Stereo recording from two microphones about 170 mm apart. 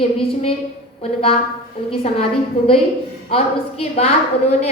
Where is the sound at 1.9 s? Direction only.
35° left (ahead or behind).